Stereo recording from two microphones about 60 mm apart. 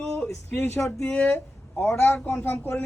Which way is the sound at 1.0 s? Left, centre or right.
Centre.